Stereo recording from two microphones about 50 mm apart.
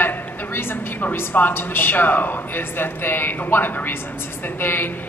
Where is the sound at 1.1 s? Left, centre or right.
Left.